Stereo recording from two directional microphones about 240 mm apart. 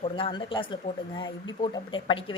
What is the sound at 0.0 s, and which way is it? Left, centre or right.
Speech, centre.